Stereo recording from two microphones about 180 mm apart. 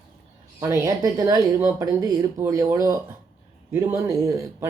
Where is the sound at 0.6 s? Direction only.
15° right (ahead or behind).